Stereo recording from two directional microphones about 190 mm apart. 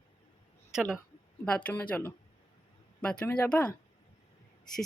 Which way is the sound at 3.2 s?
5° left (ahead or behind).